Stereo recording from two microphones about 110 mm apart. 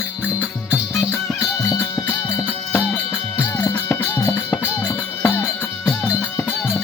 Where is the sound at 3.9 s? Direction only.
20° left (ahead or behind).